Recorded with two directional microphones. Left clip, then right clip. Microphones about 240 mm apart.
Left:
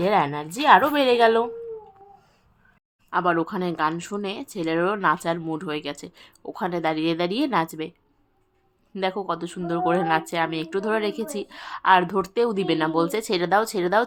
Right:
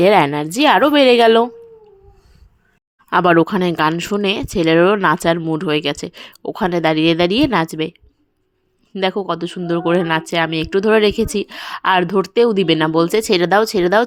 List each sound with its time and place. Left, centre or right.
0.0 s speech: right
3.1 s speech: right